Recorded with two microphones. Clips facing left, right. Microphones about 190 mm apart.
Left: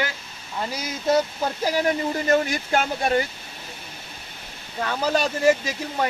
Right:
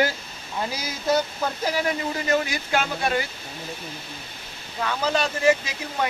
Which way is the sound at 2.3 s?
50° left (ahead or behind).